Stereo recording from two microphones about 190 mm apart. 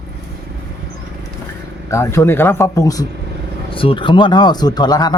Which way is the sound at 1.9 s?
15° left (ahead or behind).